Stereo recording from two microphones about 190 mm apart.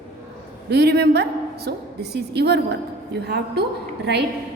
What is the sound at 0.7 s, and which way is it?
A woman's voice, 60° right (ahead or behind).